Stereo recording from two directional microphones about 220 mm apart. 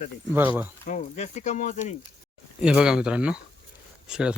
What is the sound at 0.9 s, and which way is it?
Speech, 35° left (ahead or behind).